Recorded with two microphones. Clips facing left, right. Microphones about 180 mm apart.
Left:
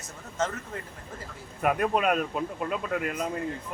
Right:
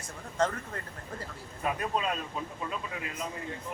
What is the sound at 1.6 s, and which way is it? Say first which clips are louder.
Speech: left 7 dB; 65° left (ahead or behind).